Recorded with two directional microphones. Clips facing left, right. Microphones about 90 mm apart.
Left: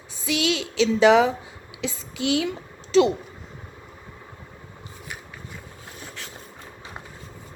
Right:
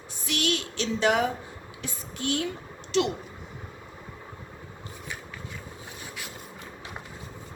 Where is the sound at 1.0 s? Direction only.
90° left.